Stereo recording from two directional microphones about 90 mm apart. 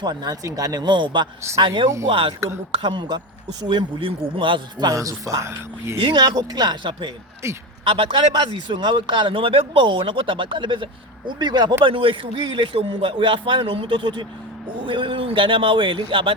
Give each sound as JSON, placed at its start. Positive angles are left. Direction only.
{"t": 0.0, "sound": "a man's voice", "side_deg": -50}
{"t": 2.0, "sound": "a man's voice", "side_deg": -75}
{"t": 4.9, "sound": "speech", "side_deg": -40}
{"t": 6.0, "sound": "speech", "side_deg": -60}
{"t": 6.3, "sound": "a man's voice", "side_deg": -45}
{"t": 7.4, "sound": "speech", "side_deg": -30}
{"t": 7.9, "sound": "a man's voice", "side_deg": -75}
{"t": 8.3, "sound": "speech", "side_deg": -60}
{"t": 11.9, "sound": "a man's voice", "side_deg": -75}
{"t": 14.8, "sound": "a man's voice", "side_deg": -75}